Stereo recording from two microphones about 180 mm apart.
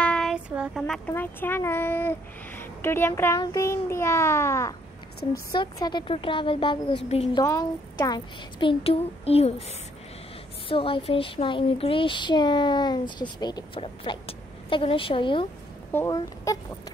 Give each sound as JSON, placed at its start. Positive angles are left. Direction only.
{"t": 0.0, "sound": "child singing", "side_deg": 5}
{"t": 1.1, "sound": "a child's voice", "side_deg": 10}
{"t": 15.9, "sound": "a child's voice", "side_deg": 15}